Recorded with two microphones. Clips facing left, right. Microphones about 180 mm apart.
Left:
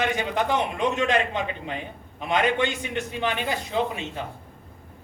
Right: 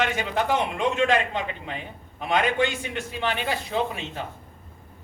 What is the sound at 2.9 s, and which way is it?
Speech, 15° left (ahead or behind).